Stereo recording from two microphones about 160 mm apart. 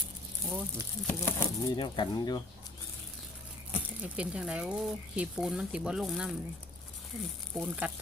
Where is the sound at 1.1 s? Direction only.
15° left (ahead or behind).